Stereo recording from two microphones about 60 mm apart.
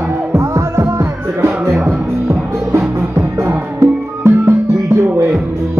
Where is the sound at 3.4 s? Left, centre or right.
Right.